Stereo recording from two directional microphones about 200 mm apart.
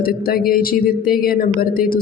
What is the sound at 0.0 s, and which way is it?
A woman's voice, 50° left (ahead or behind).